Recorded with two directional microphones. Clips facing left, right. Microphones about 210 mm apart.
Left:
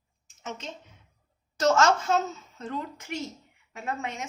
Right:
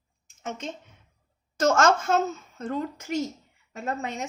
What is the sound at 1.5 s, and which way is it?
A woman's voice, 50° right (ahead or behind).